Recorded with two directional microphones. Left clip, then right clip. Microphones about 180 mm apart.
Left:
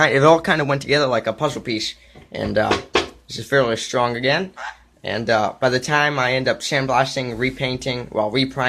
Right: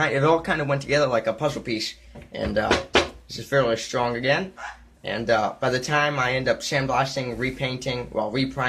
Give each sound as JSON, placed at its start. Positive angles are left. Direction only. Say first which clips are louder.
{"t": 0.0, "sound": "speech", "louder": "left 7 dB", "side_deg": 45}